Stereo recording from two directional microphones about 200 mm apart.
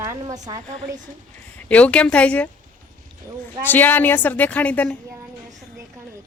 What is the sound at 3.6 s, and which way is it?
A woman's voice, 10° left (ahead or behind).